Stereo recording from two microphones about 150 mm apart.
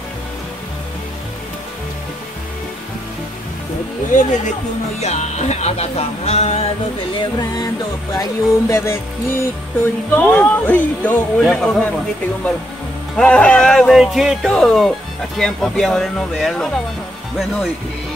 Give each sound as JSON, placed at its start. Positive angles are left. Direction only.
{"t": 4.1, "sound": "speech", "side_deg": 55}
{"t": 7.2, "sound": "music", "side_deg": 25}
{"t": 10.1, "sound": "speech", "side_deg": 10}
{"t": 13.1, "sound": "speech", "side_deg": 5}